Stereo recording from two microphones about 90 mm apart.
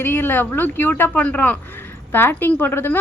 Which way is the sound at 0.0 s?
25° left (ahead or behind).